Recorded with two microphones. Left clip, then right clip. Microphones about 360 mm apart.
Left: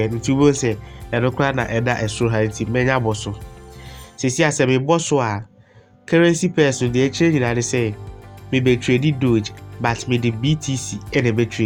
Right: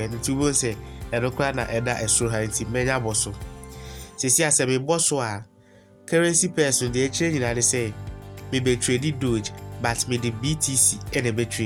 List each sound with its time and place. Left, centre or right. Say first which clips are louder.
0.0 s speech: left 8 dB; right